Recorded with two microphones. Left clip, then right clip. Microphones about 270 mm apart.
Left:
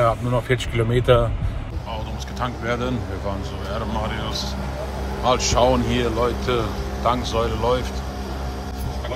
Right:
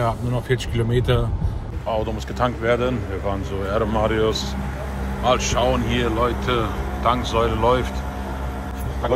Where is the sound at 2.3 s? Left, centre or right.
Centre.